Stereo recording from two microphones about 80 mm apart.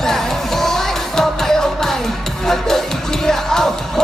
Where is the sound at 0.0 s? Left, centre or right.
Centre.